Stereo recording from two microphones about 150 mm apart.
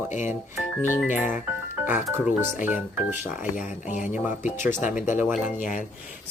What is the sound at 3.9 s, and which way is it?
Speech, 55° left (ahead or behind).